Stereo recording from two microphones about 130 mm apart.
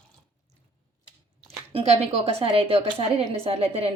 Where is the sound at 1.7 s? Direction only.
55° right (ahead or behind).